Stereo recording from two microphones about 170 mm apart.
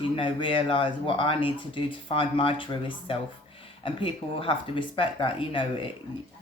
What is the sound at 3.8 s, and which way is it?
Speech, 30° left (ahead or behind).